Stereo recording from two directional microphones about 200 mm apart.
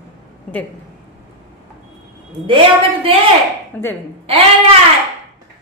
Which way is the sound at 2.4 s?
25° right (ahead or behind).